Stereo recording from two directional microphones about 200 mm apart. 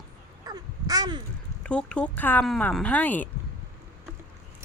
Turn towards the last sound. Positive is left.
turn(degrees=10)  # may be behind; listen again after turning